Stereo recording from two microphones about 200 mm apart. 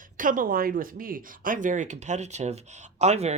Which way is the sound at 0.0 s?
40° right (ahead or behind).